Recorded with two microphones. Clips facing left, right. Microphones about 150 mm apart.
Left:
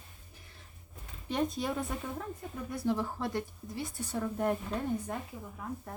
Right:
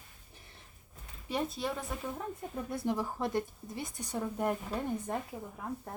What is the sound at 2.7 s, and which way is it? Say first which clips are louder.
A woman's voice: left 2 dB; 25° right (ahead or behind).